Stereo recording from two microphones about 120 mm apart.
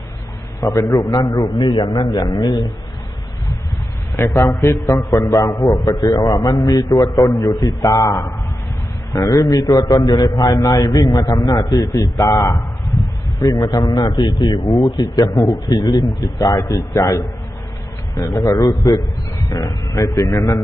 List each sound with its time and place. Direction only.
0.6 s a man's voice: 30° left (ahead or behind)
4.2 s a man's voice: 25° left (ahead or behind)